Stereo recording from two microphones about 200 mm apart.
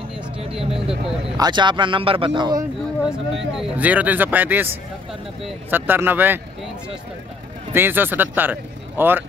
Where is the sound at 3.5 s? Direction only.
5° right (ahead or behind).